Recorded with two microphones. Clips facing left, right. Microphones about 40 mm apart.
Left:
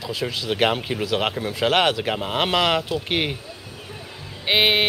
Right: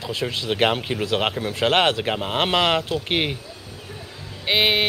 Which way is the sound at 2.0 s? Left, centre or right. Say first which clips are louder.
Even; centre.